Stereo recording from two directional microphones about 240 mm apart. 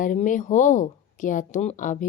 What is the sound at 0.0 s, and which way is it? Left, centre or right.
A woman's voice, left.